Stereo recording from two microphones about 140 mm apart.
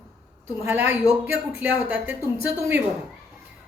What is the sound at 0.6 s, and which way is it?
A woman's voice, 15° right (ahead or behind).